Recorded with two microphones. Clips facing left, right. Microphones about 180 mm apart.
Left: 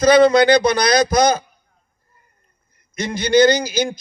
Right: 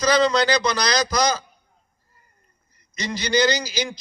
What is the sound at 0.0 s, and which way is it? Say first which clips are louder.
A man's voice: left 7 dB; 55° left (ahead or behind).